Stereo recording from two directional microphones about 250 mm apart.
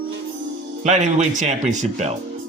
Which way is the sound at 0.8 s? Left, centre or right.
Right.